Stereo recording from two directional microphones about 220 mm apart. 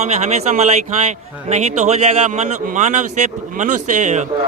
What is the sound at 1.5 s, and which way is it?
A man's voice, 30° right (ahead or behind).